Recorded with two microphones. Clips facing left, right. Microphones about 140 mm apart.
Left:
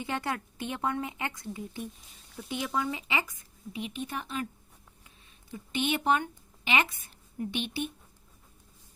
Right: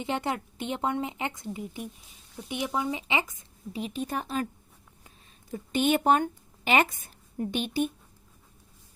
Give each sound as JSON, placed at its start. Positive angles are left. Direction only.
{"t": 0.0, "sound": "speech", "side_deg": -20}
{"t": 3.7, "sound": "speech", "side_deg": -35}
{"t": 5.5, "sound": "a woman's voice", "side_deg": -40}